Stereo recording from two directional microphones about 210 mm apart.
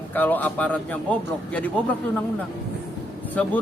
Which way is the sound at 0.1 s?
10° left (ahead or behind).